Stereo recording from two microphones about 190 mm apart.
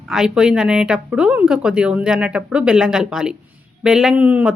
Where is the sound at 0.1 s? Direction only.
5° right (ahead or behind).